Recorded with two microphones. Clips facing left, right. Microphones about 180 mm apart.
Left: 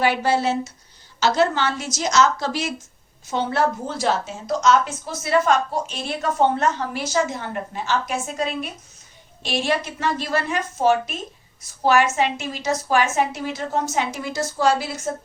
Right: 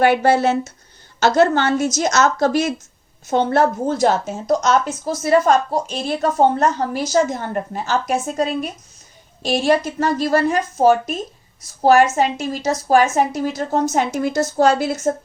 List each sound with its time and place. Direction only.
0.0 s a woman's voice: 55° right (ahead or behind)